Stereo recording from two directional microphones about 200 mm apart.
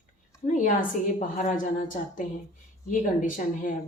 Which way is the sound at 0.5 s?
40° left (ahead or behind).